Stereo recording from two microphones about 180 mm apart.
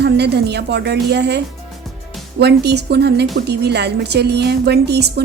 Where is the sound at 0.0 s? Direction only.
65° right (ahead or behind).